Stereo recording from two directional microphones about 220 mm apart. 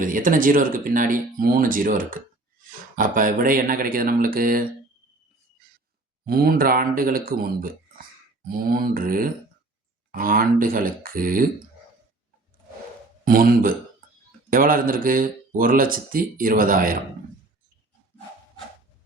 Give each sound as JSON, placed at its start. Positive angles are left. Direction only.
{"t": 0.0, "sound": "speech", "side_deg": -40}
{"t": 6.2, "sound": "speech", "side_deg": -45}
{"t": 13.2, "sound": "speech", "side_deg": -40}